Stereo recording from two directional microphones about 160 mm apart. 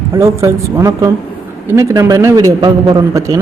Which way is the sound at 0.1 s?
15° right (ahead or behind).